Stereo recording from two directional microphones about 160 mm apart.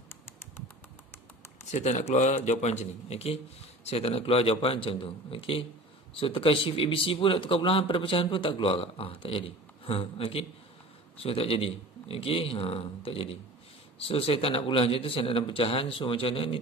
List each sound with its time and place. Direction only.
1.7 s a man's voice: 45° left (ahead or behind)